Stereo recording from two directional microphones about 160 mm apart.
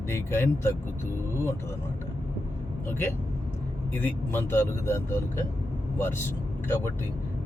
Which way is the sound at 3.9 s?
15° left (ahead or behind).